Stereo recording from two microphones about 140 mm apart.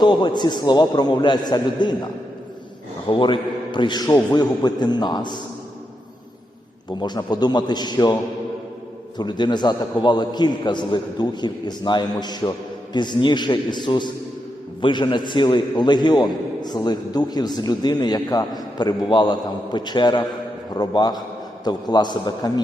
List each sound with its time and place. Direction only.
0.0 s a man's voice: 35° left (ahead or behind)
3.1 s a man's voice: 35° left (ahead or behind)
6.9 s a man's voice: 30° left (ahead or behind)